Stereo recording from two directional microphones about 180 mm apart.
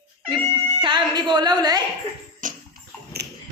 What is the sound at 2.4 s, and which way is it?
Bathtub, 60° right (ahead or behind).